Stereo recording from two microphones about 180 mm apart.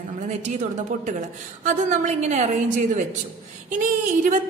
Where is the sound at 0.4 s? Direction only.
45° right (ahead or behind).